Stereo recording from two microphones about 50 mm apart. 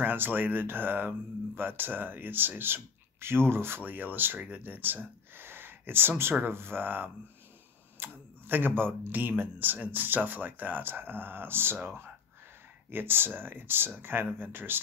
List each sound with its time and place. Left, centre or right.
0.0 s speech: right